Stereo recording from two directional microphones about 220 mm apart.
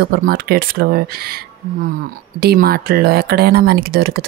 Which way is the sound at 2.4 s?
45° right (ahead or behind).